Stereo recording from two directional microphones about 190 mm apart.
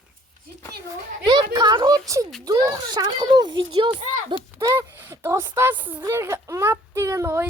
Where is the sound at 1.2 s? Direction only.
20° right (ahead or behind).